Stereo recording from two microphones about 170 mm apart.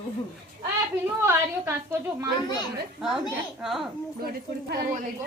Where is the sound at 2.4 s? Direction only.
25° left (ahead or behind).